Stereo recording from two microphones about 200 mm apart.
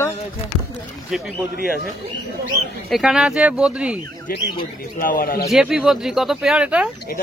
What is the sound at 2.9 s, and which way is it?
Speech, 5° right (ahead or behind).